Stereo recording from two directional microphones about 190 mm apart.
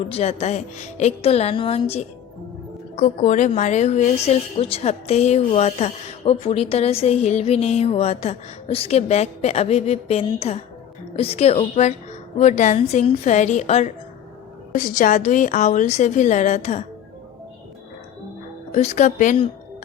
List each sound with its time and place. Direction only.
0.1 s a woman's voice: 35° left (ahead or behind)
18.7 s a woman's voice: 35° left (ahead or behind)